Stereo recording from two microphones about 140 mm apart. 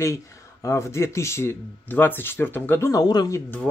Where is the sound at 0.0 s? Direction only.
20° left (ahead or behind).